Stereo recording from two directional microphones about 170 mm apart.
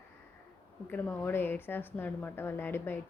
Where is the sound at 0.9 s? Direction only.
10° left (ahead or behind).